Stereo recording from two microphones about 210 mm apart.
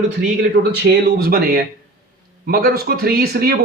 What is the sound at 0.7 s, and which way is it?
A man's voice, 50° right (ahead or behind).